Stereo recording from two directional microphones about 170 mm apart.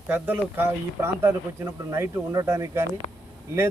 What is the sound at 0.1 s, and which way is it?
A man's voice, 10° right (ahead or behind).